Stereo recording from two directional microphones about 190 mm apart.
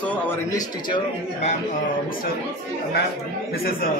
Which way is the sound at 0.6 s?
25° left (ahead or behind).